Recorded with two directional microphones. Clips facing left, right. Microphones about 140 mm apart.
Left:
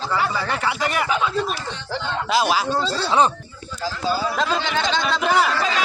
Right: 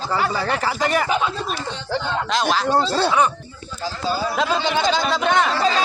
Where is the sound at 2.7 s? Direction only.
60° right (ahead or behind).